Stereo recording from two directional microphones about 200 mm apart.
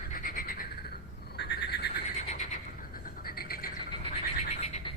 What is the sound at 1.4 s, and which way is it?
Frog, 55° left (ahead or behind).